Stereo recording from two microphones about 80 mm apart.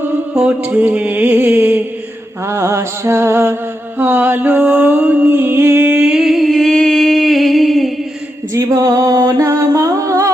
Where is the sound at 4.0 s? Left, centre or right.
Right; by 7.9 s centre.